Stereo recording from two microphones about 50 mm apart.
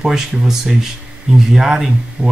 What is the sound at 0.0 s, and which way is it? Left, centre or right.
Speech, centre.